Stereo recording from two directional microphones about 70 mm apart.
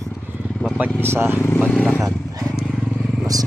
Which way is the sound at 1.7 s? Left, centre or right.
Centre.